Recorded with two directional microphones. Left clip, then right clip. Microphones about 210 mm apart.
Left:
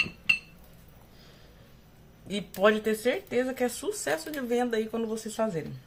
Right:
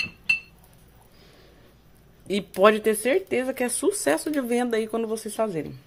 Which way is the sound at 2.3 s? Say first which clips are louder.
Right 6 dB; 40° right (ahead or behind).